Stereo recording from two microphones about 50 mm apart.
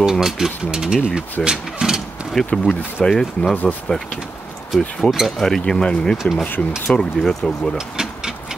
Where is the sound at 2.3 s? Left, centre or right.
Centre.